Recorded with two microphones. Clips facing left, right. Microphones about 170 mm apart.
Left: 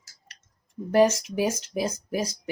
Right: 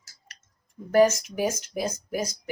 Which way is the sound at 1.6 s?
30° left (ahead or behind).